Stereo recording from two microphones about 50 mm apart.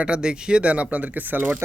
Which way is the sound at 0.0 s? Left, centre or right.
Centre.